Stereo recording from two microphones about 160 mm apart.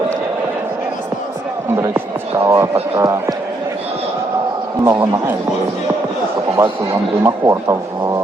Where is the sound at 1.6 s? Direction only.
15° right (ahead or behind).